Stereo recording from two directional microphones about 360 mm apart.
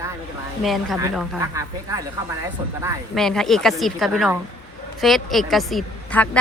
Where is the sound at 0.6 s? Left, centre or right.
Centre.